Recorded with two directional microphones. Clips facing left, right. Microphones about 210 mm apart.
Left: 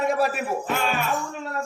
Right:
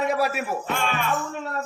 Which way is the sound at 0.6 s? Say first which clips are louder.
Left 1 dB; 5° left (ahead or behind).